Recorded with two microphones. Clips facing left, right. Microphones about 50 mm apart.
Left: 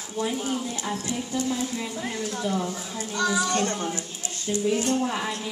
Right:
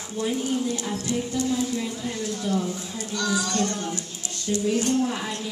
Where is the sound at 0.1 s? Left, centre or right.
Centre.